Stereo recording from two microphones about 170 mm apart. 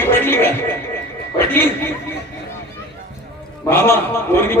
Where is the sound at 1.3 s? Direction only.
10° left (ahead or behind).